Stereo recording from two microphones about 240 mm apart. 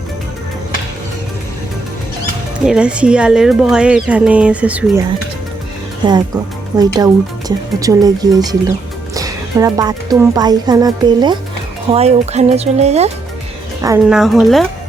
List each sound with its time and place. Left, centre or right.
2.6 s speech: centre
6.1 s speech: centre
13.8 s speech: centre
14.2 s speech: centre